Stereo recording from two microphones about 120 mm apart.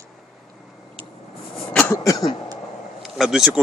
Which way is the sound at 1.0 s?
50° right (ahead or behind).